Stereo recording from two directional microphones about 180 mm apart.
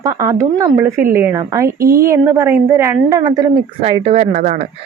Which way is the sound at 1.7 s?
55° right (ahead or behind).